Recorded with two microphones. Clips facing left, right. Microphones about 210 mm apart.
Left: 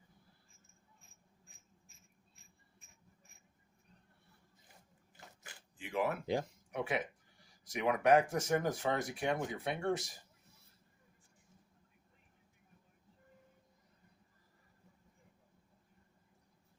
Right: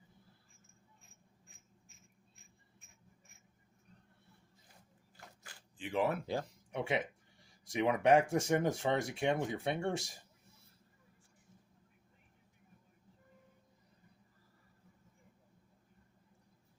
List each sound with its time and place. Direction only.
5.7 s speech: 30° right (ahead or behind)